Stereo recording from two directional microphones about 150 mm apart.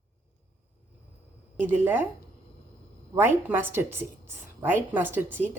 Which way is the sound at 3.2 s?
15° right (ahead or behind).